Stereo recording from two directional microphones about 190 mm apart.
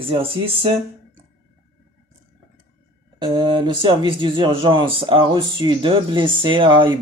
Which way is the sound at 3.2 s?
25° right (ahead or behind).